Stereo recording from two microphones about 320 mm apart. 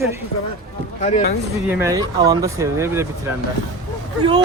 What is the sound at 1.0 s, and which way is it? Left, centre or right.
Speech, left.